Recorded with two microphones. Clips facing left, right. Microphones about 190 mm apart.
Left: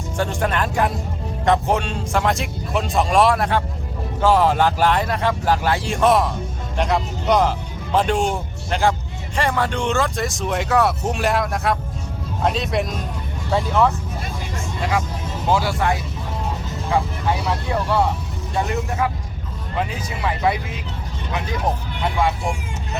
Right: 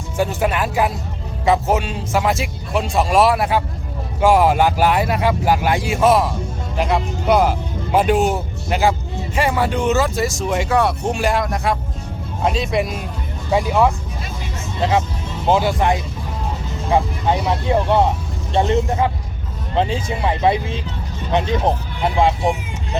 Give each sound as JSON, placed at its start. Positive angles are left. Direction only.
{"t": 0.2, "sound": "speech", "side_deg": -5}
{"t": 13.5, "sound": "speech", "side_deg": -15}
{"t": 14.8, "sound": "speech", "side_deg": -25}